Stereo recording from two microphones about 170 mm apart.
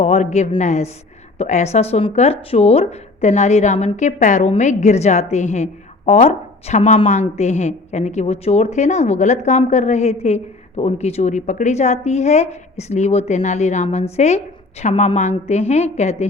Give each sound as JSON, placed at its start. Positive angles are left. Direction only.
{"t": 0.0, "sound": "a woman's voice", "side_deg": 40}